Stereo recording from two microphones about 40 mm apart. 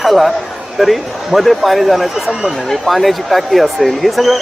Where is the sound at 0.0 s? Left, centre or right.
Centre.